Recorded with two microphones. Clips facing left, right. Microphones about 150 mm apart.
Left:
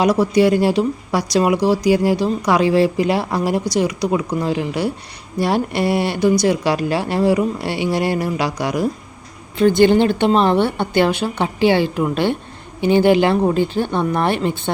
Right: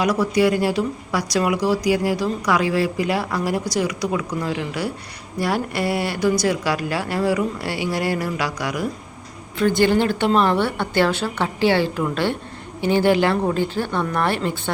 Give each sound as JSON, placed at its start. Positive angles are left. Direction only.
{"t": 0.0, "sound": "speech", "side_deg": 25}